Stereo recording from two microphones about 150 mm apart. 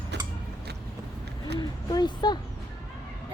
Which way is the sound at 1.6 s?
25° left (ahead or behind).